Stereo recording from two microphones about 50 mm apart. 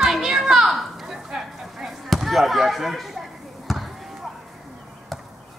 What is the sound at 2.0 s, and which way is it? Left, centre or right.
Speech, centre.